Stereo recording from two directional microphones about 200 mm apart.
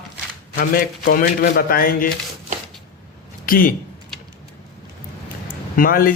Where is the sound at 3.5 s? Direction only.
45° left (ahead or behind).